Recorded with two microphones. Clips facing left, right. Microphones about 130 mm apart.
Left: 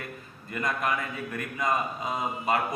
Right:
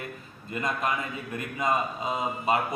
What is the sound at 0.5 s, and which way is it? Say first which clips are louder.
Speech: even; 20° right (ahead or behind).